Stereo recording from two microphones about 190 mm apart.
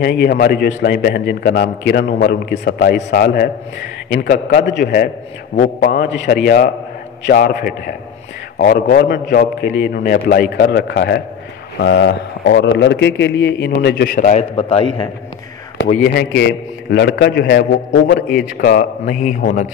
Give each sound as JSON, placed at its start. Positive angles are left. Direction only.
{"t": 0.0, "sound": "a man's voice", "side_deg": 60}
{"t": 4.1, "sound": "a man's voice", "side_deg": 50}
{"t": 5.6, "sound": "a man's voice", "side_deg": 45}
{"t": 6.2, "sound": "a man's voice", "side_deg": 55}
{"t": 14.1, "sound": "a man's voice", "side_deg": 40}
{"t": 14.5, "sound": "a man's voice", "side_deg": 30}
{"t": 16.1, "sound": "a man's voice", "side_deg": 60}